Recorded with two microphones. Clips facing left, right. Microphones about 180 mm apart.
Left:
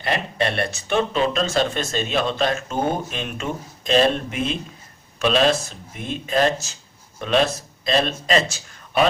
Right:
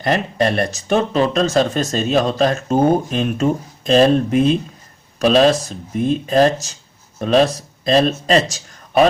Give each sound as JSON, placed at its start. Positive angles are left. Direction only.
{"t": 0.0, "sound": "speech", "side_deg": -40}